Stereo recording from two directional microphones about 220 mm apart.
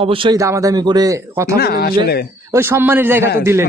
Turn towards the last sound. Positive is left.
turn(degrees=-10)  # may be behind; listen again after turning